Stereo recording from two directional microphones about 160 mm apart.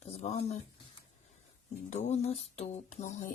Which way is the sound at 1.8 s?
45° left (ahead or behind).